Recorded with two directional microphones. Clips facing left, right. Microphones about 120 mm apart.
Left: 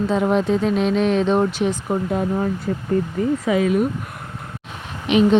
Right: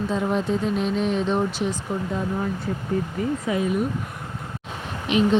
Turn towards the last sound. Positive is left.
turn(degrees=75)  # may be behind; listen again after turning